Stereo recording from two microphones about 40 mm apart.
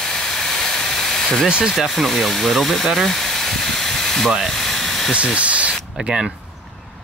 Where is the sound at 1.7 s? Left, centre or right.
Centre.